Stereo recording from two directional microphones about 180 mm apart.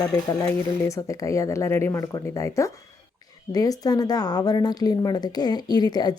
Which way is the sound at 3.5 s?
20° left (ahead or behind).